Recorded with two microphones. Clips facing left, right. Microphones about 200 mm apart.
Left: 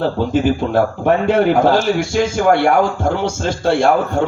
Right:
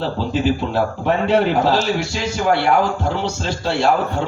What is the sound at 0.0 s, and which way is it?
A man's voice, 50° left (ahead or behind).